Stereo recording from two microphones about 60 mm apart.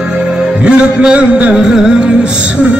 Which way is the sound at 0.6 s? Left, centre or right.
Centre.